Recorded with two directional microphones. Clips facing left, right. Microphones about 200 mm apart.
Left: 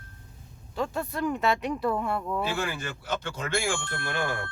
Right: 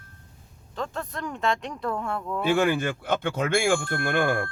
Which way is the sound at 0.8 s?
10° left (ahead or behind).